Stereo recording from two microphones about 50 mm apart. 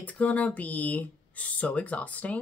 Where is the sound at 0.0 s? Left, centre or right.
Left.